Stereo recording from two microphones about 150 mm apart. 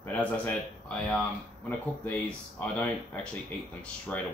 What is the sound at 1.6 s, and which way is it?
Speech, 10° left (ahead or behind).